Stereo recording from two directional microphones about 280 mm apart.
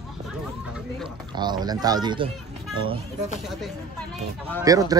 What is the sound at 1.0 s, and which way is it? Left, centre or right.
Speech, centre.